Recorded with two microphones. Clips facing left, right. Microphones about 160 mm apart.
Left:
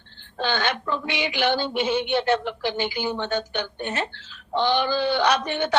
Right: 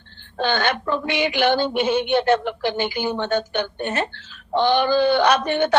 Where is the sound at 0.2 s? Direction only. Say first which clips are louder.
Right 4 dB; 50° right (ahead or behind).